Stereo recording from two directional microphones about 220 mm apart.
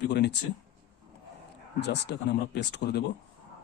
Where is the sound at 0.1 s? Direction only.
50° left (ahead or behind).